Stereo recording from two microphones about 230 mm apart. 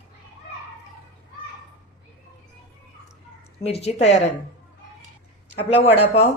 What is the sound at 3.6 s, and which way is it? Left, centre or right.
Speech, left.